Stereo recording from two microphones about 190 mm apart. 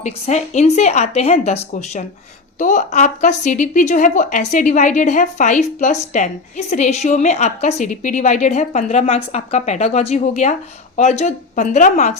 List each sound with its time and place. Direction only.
0.0 s speech: 35° left (ahead or behind)